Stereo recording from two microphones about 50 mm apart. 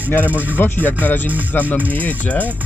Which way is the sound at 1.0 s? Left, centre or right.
Left.